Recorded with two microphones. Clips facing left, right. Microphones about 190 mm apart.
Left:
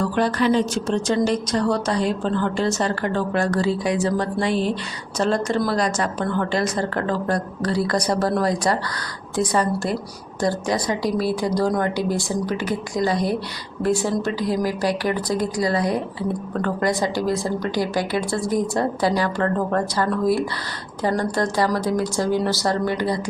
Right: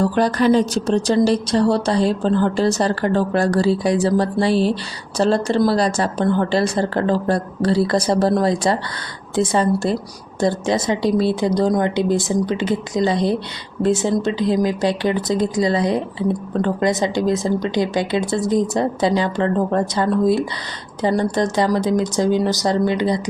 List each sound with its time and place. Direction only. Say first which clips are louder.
0.0 s a woman's voice: right 4 dB; 40° right (ahead or behind); by 23.2 s 20° right (ahead or behind)